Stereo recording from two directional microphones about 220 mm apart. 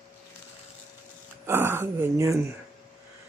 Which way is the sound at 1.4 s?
10° right (ahead or behind).